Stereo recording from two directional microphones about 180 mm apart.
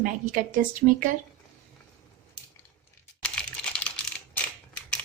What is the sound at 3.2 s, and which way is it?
Typing, 5° left (ahead or behind).